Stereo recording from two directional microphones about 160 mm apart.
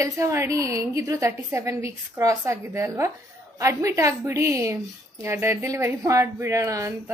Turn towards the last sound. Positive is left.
turn(degrees=-20)  # may be behind; listen again after turning